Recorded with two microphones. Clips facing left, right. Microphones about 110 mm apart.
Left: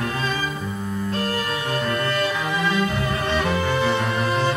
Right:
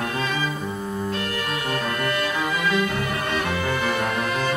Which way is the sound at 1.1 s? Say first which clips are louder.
Left 2 dB; 35° left (ahead or behind).